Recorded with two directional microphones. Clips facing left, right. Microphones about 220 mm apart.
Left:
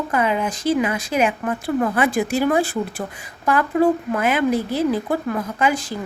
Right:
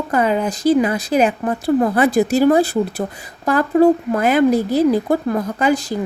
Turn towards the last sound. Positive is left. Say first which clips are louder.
# right 4 dB
turn(degrees=-40)  # may be behind; listen again after turning